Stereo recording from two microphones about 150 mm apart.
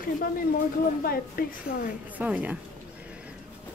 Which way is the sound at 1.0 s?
80° left.